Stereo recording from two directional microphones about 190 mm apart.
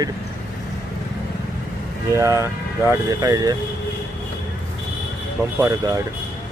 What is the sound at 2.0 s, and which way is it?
Speech, 15° right (ahead or behind).